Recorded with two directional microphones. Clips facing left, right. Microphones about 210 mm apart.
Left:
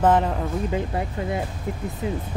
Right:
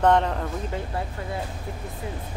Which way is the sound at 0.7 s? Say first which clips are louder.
Left 5 dB; 15° left (ahead or behind).